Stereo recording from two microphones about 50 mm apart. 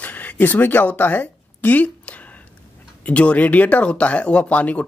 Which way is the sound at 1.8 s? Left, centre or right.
Left.